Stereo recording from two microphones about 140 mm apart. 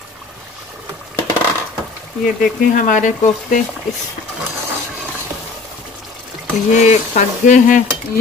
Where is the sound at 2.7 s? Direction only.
65° left (ahead or behind).